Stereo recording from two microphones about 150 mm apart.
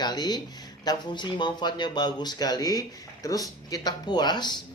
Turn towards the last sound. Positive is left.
turn(degrees=30)  # may be behind; listen again after turning